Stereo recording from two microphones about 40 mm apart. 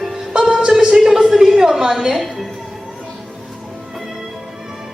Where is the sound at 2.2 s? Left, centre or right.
Centre.